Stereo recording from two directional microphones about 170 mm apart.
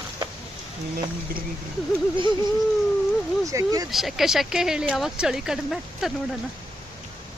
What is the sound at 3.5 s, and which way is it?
Speech, 20° right (ahead or behind).